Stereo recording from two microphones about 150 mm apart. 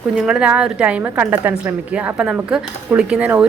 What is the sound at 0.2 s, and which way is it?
A woman's voice, 5° right (ahead or behind).